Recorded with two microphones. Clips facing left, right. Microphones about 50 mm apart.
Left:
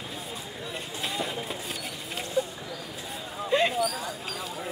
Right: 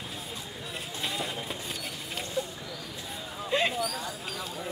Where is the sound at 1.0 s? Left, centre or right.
Centre.